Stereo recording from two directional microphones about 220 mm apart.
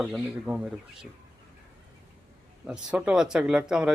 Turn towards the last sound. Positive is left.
turn(degrees=-5)  # may be behind; listen again after turning